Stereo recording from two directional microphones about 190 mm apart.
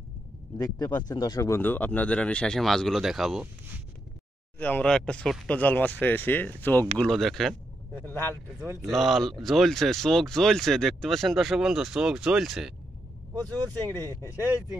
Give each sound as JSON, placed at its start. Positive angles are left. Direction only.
{"t": 0.6, "sound": "speech", "side_deg": 20}
{"t": 4.6, "sound": "speech", "side_deg": 10}
{"t": 8.5, "sound": "speech", "side_deg": -5}
{"t": 14.0, "sound": "speech", "side_deg": -15}